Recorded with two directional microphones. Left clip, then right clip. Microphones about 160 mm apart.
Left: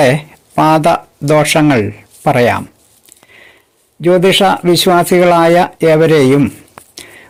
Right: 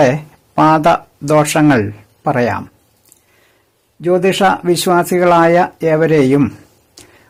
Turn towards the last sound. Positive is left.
turn(degrees=5)  # may be behind; listen again after turning